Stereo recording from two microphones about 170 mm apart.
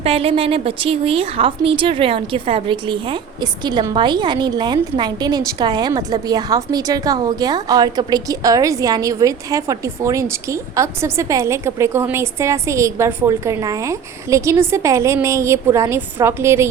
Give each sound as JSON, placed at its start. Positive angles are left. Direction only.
{"t": 0.0, "sound": "a woman's voice", "side_deg": -35}